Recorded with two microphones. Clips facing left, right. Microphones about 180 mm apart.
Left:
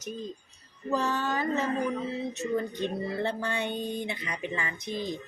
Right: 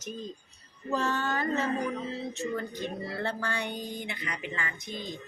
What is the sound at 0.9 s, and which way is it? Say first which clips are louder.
Music: left 1 dB; 15° left (ahead or behind).